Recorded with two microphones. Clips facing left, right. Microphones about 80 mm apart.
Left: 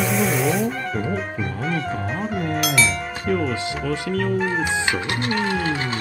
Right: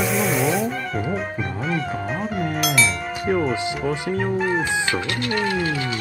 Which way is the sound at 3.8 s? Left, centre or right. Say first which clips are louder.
Left 1 dB; right.